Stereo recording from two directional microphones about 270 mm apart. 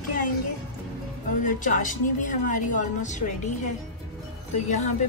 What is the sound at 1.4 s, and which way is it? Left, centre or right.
A woman's voice, left.